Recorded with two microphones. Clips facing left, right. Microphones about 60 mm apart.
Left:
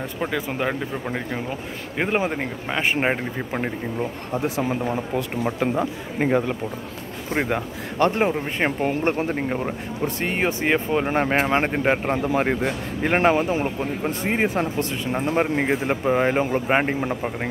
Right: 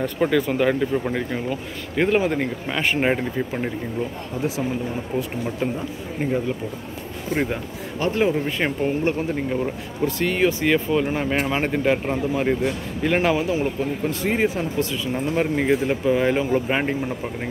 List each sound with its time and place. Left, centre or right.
0.0 s speech: centre
1.5 s speech: left
4.3 s speech: left
8.1 s speech: left
12.2 s speech: left
12.4 s speech: left
13.7 s speech: left
14.5 s speech: left
15.8 s speech: left